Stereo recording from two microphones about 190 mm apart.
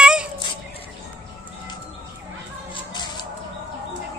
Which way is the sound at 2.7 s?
25° left (ahead or behind).